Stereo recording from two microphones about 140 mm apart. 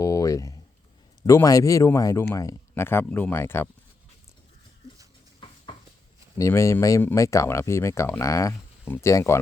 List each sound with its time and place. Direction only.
0.0 s a sound: 25° left (ahead or behind)
1.3 s speech: 20° left (ahead or behind)
6.3 s speech: 20° left (ahead or behind)